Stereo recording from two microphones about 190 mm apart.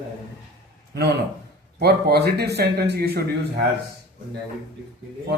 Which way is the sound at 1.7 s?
55° right (ahead or behind).